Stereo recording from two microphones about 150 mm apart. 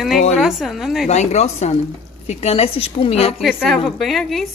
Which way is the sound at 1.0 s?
50° left (ahead or behind).